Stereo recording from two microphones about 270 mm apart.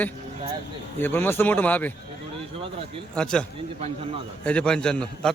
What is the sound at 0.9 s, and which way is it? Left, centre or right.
Speech, centre.